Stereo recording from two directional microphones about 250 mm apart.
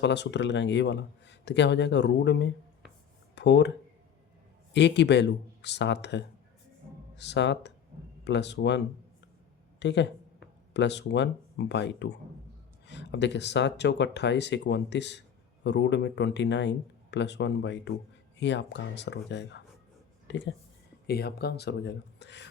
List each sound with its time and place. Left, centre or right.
0.0 s speech: left
4.7 s speech: left
9.8 s speech: left